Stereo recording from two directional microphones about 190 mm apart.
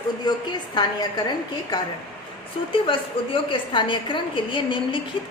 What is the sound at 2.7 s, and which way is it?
A woman's voice, 25° left (ahead or behind).